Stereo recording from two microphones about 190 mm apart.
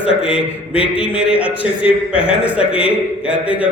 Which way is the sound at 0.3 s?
5° right (ahead or behind).